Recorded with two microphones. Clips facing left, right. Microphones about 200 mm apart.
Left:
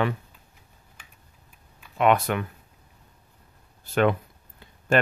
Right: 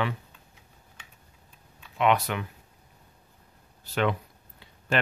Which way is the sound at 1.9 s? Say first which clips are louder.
Left 3 dB; 50° left (ahead or behind).